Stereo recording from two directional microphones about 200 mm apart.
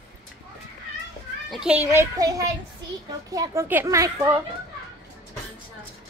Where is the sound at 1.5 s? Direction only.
5° right (ahead or behind).